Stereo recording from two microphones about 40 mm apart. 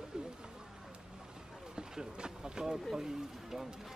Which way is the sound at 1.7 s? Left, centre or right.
Right.